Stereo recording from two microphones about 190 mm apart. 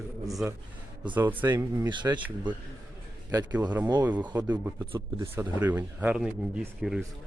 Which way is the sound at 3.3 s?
20° right (ahead or behind).